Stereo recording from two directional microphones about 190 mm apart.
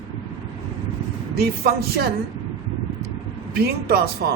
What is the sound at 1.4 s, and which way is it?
Speech, 55° right (ahead or behind).